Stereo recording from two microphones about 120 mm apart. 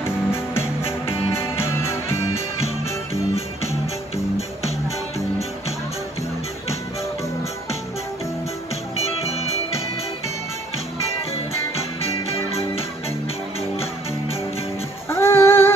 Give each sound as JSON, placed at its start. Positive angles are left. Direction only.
{"t": 0.3, "sound": "music", "side_deg": 20}
{"t": 4.4, "sound": "music", "side_deg": 60}
{"t": 8.9, "sound": "music", "side_deg": 60}
{"t": 11.7, "sound": "music", "side_deg": 55}
{"t": 15.0, "sound": "music", "side_deg": 20}